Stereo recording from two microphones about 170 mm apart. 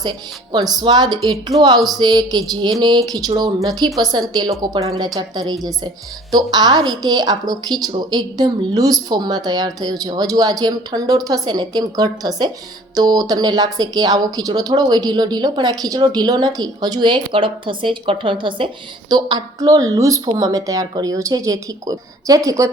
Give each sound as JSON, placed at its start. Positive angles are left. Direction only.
{"t": 0.0, "sound": "a woman's voice", "side_deg": -25}